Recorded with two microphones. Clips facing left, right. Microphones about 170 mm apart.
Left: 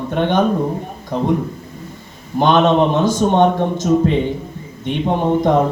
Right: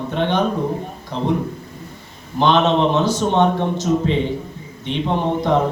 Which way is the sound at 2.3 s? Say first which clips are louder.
Left 3 dB; 50° left (ahead or behind).